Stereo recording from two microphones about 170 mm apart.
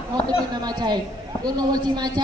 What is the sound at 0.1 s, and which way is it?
A man's voice, 25° right (ahead or behind).